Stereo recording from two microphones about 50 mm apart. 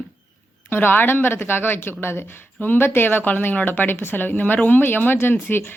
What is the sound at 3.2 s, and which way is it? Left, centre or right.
Speech, left.